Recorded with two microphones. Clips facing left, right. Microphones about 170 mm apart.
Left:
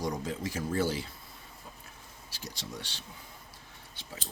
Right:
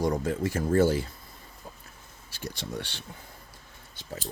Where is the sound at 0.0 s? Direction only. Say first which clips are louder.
Right 7 dB; 55° right (ahead or behind).